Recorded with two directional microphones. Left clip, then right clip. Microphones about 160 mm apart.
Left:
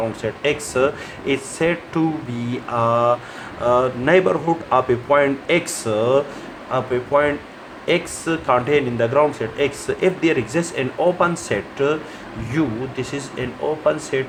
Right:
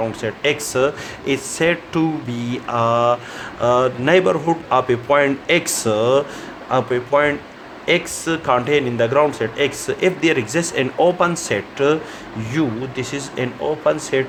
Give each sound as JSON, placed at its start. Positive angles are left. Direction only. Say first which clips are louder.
{"t": 0.2, "sound": "speech", "louder": "right 1 dB", "side_deg": -40}